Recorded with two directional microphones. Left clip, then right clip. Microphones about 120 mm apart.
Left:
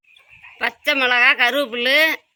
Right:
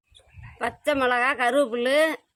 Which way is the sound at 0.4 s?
15° right (ahead or behind).